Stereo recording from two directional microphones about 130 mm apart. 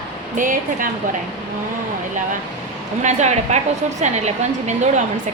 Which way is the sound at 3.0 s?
65° right (ahead or behind).